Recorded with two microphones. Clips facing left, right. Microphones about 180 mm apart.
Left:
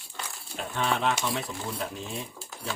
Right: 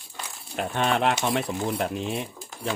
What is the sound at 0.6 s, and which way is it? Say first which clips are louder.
Speech: right 5 dB; 70° right (ahead or behind).